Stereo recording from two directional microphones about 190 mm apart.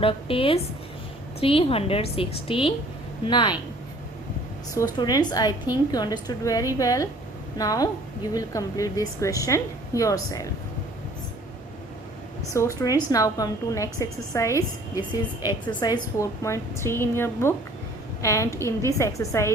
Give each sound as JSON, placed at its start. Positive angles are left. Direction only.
{"t": 0.0, "sound": "a woman's voice", "side_deg": 30}
{"t": 4.8, "sound": "a woman's voice", "side_deg": 20}
{"t": 12.4, "sound": "a woman's voice", "side_deg": 15}